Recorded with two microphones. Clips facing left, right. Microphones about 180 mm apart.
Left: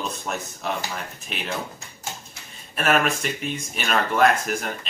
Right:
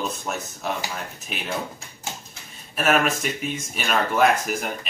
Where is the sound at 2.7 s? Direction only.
Centre (ahead or behind).